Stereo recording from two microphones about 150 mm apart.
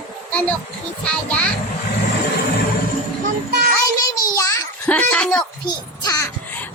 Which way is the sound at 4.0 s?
25° left (ahead or behind).